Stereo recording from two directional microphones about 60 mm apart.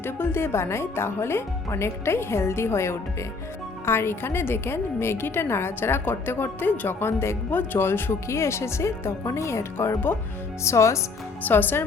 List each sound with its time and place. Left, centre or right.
0.0 s a woman's voice: left
11.4 s speech: left